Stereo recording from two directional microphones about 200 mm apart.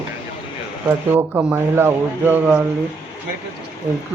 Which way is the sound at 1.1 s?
10° right (ahead or behind).